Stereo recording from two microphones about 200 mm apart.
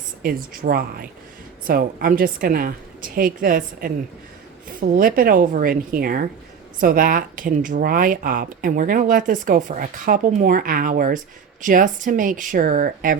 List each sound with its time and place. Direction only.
0.2 s speech: 45° right (ahead or behind)